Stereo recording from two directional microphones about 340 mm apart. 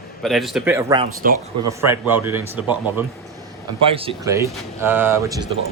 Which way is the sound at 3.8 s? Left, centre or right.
Centre.